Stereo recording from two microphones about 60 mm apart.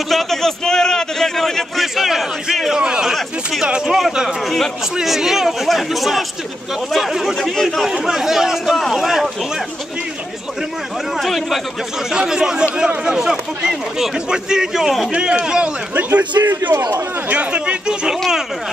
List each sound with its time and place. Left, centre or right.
0.1 s a sound: centre
2.8 s speech: centre
4.9 s a man's voice: centre
11.1 s a man's voice: centre
12.1 s speech: centre
15.1 s speech: centre
15.9 s speech: right
17.3 s speech: right